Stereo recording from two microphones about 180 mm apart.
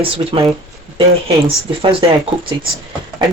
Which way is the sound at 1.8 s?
30° right (ahead or behind).